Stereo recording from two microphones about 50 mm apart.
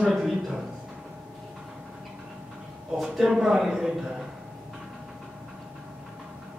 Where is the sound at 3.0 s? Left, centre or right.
Centre.